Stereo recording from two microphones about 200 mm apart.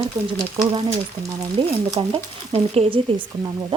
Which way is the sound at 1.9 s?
30° right (ahead or behind).